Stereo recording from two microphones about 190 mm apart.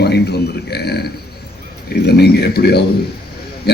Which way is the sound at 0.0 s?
60° left (ahead or behind).